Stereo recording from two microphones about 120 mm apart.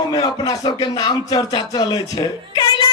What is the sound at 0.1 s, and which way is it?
Speech, 35° left (ahead or behind).